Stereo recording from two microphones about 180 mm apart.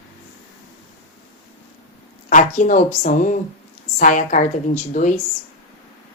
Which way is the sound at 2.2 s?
45° left (ahead or behind).